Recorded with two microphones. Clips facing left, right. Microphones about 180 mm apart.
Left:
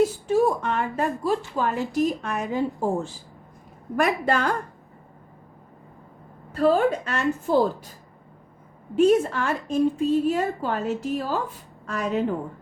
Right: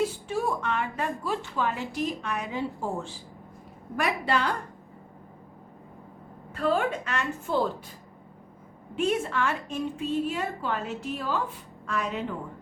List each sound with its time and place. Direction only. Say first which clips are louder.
0.0 s a woman's voice: left 8 dB; 40° left (ahead or behind)
6.5 s a woman's voice: left 6 dB; 35° left (ahead or behind)
9.0 s a woman's voice: left 8 dB; 40° left (ahead or behind)